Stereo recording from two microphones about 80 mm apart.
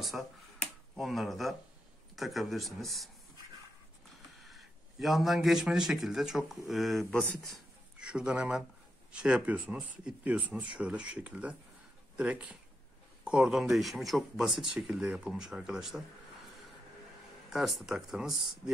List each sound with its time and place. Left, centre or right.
0.0 s speech: centre
4.5 s a man's voice: centre
8.0 s speech: centre
17.5 s speech: centre